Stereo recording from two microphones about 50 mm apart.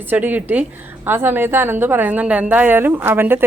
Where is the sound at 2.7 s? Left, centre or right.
Right.